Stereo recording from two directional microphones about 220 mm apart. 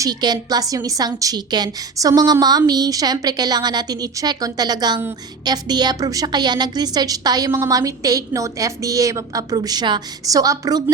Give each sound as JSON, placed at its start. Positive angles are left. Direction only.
{"t": 0.0, "sound": "a woman's voice", "side_deg": -20}